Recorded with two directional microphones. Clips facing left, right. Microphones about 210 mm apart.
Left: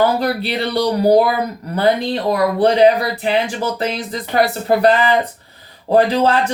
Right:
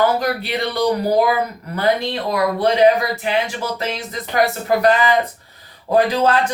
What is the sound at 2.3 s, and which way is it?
Speech, 35° left (ahead or behind).